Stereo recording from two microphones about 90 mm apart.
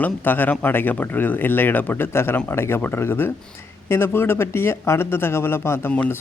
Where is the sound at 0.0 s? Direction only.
20° left (ahead or behind).